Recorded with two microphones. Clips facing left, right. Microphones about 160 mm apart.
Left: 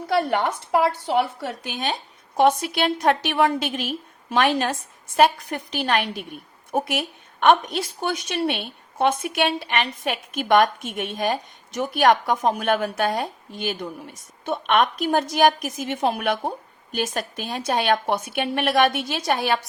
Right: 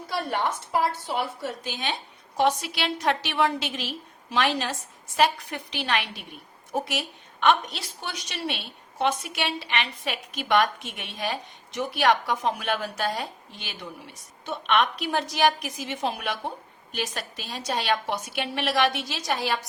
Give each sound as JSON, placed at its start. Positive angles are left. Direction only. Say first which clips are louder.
{"t": 0.1, "sound": "a woman's voice", "louder": "left 6 dB", "side_deg": 65}
{"t": 1.8, "sound": "a woman's voice", "louder": "left 4 dB", "side_deg": 45}